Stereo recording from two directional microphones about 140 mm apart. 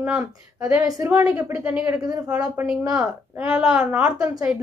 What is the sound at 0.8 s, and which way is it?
Speech, 25° right (ahead or behind).